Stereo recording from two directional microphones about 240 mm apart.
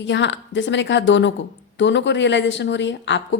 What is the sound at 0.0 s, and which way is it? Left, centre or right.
A woman's voice, left.